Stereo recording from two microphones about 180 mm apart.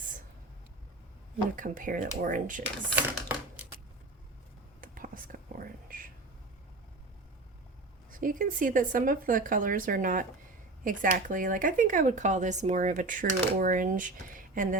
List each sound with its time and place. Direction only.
1.5 s speech: 50° right (ahead or behind)
2.9 s typing: 10° right (ahead or behind)
4.8 s whispering: 50° right (ahead or behind)
8.1 s speech: 50° right (ahead or behind)